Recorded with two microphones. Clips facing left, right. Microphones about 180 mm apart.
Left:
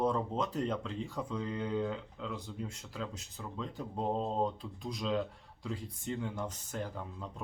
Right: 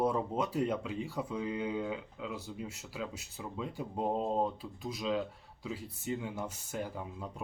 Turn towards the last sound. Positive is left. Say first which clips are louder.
# right 1 dB
turn(degrees=-10)  # may be behind; listen again after turning